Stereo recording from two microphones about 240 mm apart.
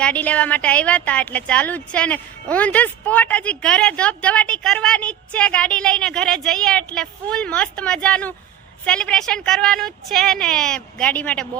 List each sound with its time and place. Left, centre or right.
0.0 s a woman's voice: centre